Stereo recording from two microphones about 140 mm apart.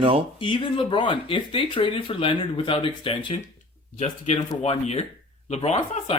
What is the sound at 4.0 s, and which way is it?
Speech, 55° left (ahead or behind).